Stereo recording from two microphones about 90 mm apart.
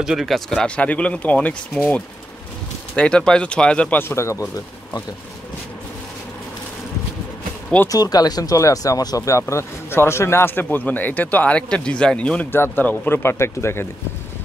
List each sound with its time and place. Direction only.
0.0 s speech: 5° right (ahead or behind)
0.5 s speech: 10° left (ahead or behind)
4.0 s speech: 30° left (ahead or behind)
7.9 s speech: 45° left (ahead or behind); by 13.8 s 30° left (ahead or behind)